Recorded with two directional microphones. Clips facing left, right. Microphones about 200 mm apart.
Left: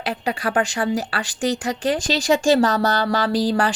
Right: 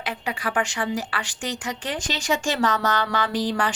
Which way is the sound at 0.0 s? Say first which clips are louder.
Left 5 dB; 35° left (ahead or behind).